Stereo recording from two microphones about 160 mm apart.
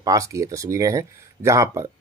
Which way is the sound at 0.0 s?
20° right (ahead or behind).